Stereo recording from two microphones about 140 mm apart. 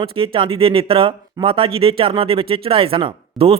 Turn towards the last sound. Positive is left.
turn(degrees=-40)  # may be behind; listen again after turning